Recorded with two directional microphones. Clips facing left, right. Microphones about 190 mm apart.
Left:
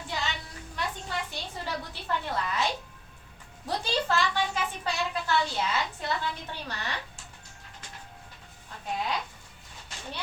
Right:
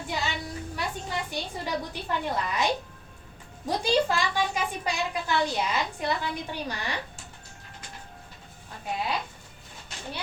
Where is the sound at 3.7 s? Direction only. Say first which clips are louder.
Right 4 dB; 15° right (ahead or behind).